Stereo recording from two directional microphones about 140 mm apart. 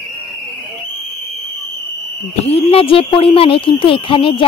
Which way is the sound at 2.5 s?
40° left (ahead or behind).